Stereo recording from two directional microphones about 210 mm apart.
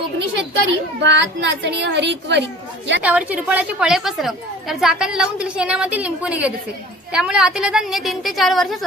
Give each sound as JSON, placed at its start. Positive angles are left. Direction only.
{"t": 1.0, "sound": "a woman's voice", "side_deg": -55}
{"t": 3.0, "sound": "a woman's voice", "side_deg": -5}